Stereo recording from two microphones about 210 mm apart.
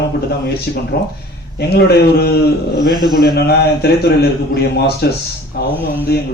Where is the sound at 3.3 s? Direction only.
50° left (ahead or behind).